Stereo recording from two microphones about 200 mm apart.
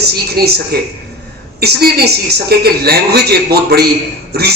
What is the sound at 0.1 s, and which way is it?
A man's voice, 50° right (ahead or behind).